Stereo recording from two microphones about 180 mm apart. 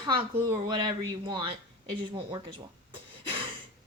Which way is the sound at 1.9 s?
30° right (ahead or behind).